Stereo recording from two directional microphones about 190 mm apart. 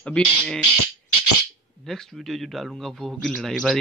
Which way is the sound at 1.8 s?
Centre (ahead or behind).